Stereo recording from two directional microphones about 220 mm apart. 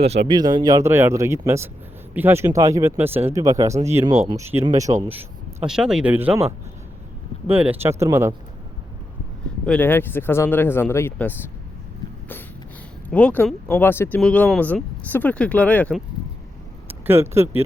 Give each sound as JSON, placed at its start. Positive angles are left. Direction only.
{"t": 0.3, "sound": "speech", "side_deg": -20}
{"t": 5.6, "sound": "speech", "side_deg": -5}
{"t": 7.4, "sound": "speech", "side_deg": -10}
{"t": 9.6, "sound": "speech", "side_deg": 5}
{"t": 13.1, "sound": "speech", "side_deg": 5}
{"t": 16.9, "sound": "speech", "side_deg": -10}